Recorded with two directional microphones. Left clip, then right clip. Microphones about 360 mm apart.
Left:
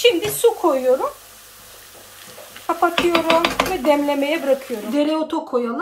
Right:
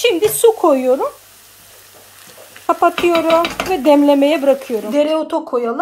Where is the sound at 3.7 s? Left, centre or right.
Right.